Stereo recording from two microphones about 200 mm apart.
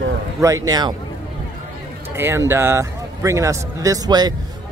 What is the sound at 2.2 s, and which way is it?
Speech, 10° right (ahead or behind).